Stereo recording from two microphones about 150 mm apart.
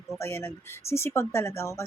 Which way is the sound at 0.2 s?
15° left (ahead or behind).